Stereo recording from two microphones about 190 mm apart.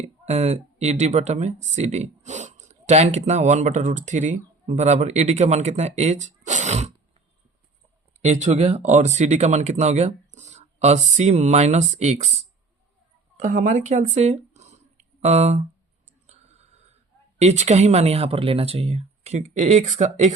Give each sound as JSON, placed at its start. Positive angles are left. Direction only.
{"t": 0.3, "sound": "speech", "side_deg": -35}
{"t": 8.2, "sound": "speech", "side_deg": -35}
{"t": 16.2, "sound": "a sound", "side_deg": -35}
{"t": 17.4, "sound": "speech", "side_deg": -35}